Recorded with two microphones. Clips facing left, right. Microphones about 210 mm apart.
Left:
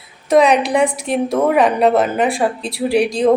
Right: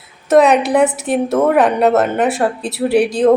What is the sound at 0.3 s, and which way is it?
A woman's voice, 5° right (ahead or behind).